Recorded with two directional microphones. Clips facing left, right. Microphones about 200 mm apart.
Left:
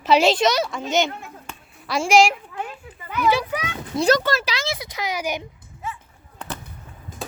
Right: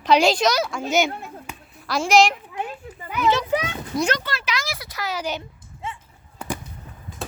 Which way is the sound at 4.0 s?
40° left (ahead or behind).